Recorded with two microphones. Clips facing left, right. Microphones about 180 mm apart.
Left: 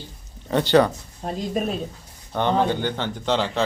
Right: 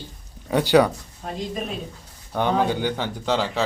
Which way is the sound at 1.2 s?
35° left (ahead or behind).